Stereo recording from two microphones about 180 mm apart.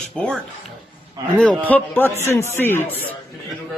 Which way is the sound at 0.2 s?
5° left (ahead or behind).